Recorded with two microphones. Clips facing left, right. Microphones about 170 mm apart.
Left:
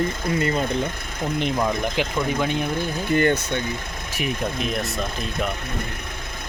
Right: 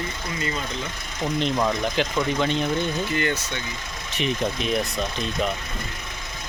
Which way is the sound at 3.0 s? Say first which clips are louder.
Left 6 dB; 50° left (ahead or behind).